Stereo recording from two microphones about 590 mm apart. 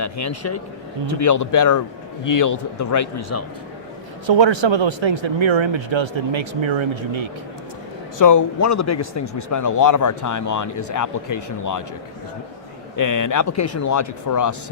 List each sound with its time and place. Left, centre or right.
0.0 s speech: left
4.3 s speech: right
8.2 s speech: left
13.0 s speech: left